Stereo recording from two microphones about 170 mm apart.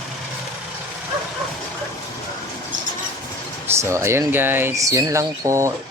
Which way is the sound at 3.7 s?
15° right (ahead or behind).